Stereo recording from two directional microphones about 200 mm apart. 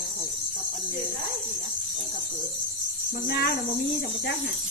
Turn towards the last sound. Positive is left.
turn(degrees=55)  # may be behind; listen again after turning